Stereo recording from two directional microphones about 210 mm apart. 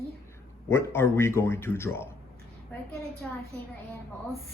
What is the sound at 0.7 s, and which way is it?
Speech, 10° left (ahead or behind).